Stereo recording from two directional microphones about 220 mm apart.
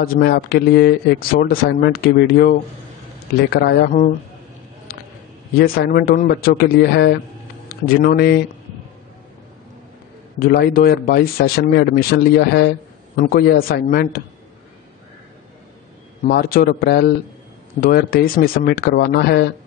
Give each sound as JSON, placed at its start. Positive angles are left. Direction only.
{"t": 0.0, "sound": "speech", "side_deg": 45}
{"t": 5.6, "sound": "speech", "side_deg": 40}
{"t": 10.4, "sound": "speech", "side_deg": 45}
{"t": 16.3, "sound": "speech", "side_deg": 45}